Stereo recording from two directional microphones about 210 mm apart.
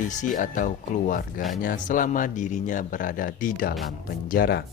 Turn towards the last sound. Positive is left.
turn(degrees=45)  # may be behind; listen again after turning